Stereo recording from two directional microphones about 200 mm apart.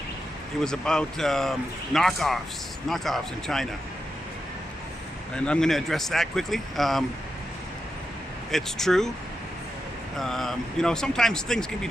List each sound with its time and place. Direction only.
0.6 s speech: 5° left (ahead or behind)
5.3 s speech: 5° left (ahead or behind)
8.4 s speech: centre (ahead or behind)
10.2 s speech: centre (ahead or behind)